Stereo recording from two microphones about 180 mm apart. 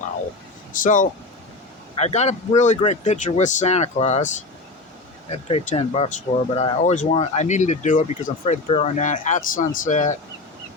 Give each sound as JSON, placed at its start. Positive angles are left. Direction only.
{"t": 0.7, "sound": "speech", "side_deg": 45}
{"t": 5.3, "sound": "speech", "side_deg": 35}